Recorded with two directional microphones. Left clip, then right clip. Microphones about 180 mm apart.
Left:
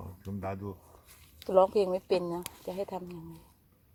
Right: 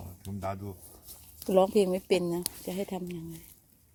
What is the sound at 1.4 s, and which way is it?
Speech, 40° right (ahead or behind).